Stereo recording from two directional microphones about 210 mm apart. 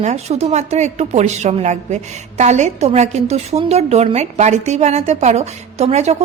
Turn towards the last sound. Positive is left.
turn(degrees=-30)  # may be behind; listen again after turning